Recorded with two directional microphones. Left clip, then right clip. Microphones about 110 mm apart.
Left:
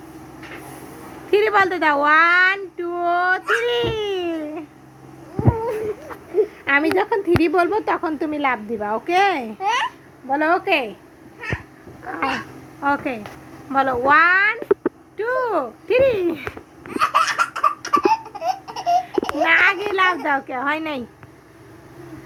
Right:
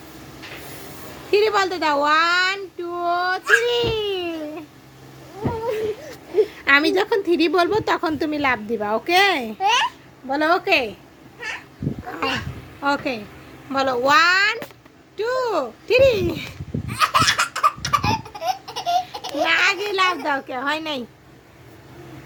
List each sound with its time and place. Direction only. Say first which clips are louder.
1.3 s speech: left 2 dB; 25° right (ahead or behind)
6.3 s a woman's voice: right 2 dB; 60° right (ahead or behind); by 10.9 s 35° right (ahead or behind)
12.8 s a child's voice: left 1 dB; 35° right (ahead or behind)
16.9 s laughter: even; 45° right (ahead or behind)
19.4 s a child's voice: left 2 dB; 30° right (ahead or behind)
20.2 s a woman's voice: left 2 dB; 15° right (ahead or behind)